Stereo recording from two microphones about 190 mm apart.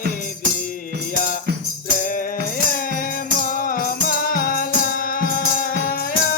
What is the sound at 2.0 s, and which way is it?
Music, 45° left (ahead or behind).